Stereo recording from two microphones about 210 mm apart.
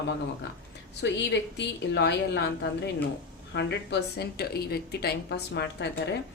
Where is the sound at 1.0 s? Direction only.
55° left (ahead or behind).